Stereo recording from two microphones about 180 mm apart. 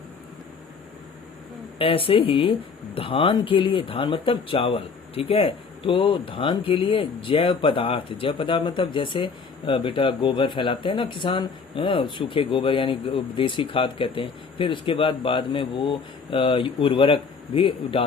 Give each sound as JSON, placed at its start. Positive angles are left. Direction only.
{"t": 1.8, "sound": "speech", "side_deg": 30}